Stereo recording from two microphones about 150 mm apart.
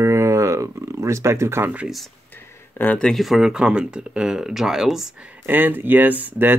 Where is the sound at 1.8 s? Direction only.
Centre (ahead or behind).